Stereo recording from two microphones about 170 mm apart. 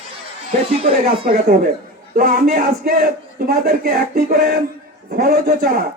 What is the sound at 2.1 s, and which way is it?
A man's voice, 55° right (ahead or behind).